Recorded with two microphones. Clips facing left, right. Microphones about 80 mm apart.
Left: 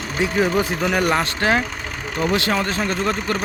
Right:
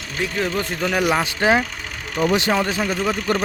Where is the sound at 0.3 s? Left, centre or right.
Centre.